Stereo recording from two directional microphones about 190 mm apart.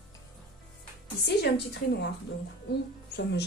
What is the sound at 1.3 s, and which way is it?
Speech, 60° left (ahead or behind).